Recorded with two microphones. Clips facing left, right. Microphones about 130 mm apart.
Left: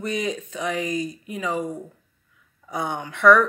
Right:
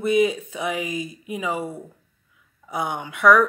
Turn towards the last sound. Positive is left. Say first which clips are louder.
# even
turn(degrees=-5)  # may be behind; listen again after turning